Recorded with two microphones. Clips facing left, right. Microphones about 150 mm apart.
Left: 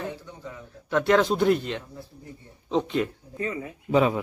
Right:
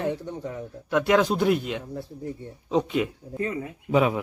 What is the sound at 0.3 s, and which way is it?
Speech, 55° right (ahead or behind).